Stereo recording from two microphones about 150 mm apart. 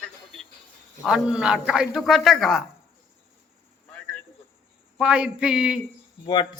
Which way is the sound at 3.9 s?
5° left (ahead or behind).